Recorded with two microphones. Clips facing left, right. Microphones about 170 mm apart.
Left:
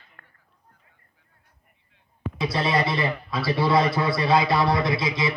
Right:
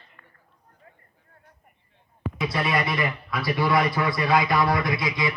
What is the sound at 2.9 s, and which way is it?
A man's voice, 30° left (ahead or behind).